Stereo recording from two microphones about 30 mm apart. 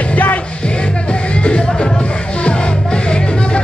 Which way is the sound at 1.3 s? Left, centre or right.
Left.